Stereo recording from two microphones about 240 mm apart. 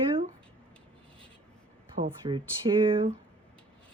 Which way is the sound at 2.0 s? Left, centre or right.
Right.